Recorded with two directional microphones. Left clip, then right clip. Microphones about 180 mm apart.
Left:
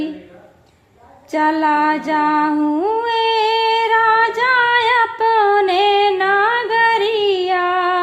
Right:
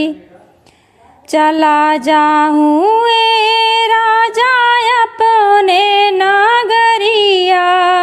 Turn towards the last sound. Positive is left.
turn(degrees=-35)  # may be behind; listen again after turning